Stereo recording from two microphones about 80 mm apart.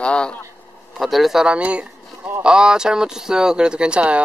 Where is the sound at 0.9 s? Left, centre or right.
Centre.